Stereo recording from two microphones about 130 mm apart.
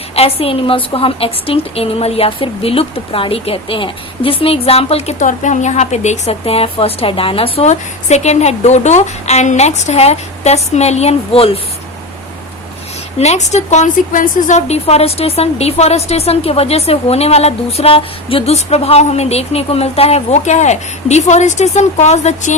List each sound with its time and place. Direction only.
0.2 s a woman's voice: 50° left (ahead or behind)
5.2 s a woman's voice: 70° left (ahead or behind); by 11.6 s 50° left (ahead or behind)
13.1 s a woman's voice: 60° left (ahead or behind)